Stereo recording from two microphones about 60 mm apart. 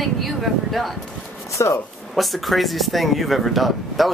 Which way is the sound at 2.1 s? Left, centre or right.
Centre.